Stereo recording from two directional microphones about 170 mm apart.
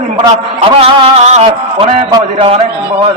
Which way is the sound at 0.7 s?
35° right (ahead or behind).